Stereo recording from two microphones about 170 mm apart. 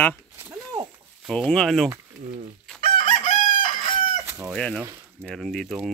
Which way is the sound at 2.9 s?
50° left (ahead or behind).